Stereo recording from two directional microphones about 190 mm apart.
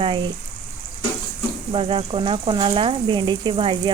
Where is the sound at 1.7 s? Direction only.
25° right (ahead or behind).